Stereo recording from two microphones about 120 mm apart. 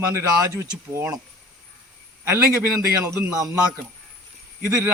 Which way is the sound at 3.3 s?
30° right (ahead or behind).